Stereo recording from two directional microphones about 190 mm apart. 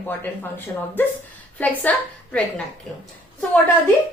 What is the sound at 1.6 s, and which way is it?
A woman's voice, 5° left (ahead or behind).